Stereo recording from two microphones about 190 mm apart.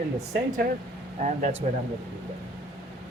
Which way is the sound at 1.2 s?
40° right (ahead or behind).